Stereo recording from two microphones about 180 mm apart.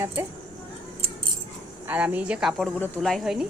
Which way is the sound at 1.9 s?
10° right (ahead or behind).